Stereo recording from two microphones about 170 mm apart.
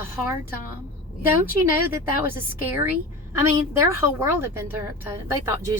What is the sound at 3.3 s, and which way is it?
Speech, 15° right (ahead or behind).